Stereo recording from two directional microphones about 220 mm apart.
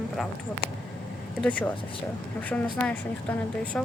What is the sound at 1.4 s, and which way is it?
A woman's voice, 5° left (ahead or behind).